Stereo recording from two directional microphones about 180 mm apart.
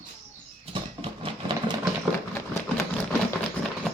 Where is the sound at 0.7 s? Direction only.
30° right (ahead or behind).